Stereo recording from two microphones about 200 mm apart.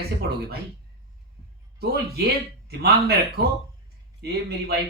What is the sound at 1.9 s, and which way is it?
Speech, 55° right (ahead or behind).